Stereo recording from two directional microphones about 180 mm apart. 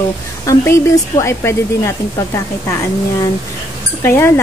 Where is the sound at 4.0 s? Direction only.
15° left (ahead or behind).